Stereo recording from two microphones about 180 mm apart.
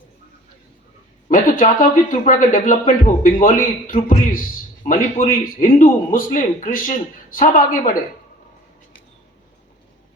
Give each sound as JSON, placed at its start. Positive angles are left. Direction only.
{"t": 1.3, "sound": "speech", "side_deg": 45}